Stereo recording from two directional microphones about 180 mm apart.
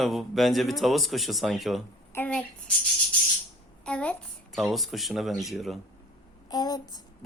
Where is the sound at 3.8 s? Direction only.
5° left (ahead or behind).